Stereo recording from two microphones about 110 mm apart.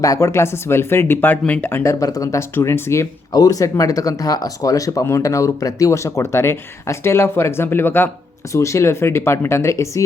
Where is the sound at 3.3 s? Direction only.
35° left (ahead or behind).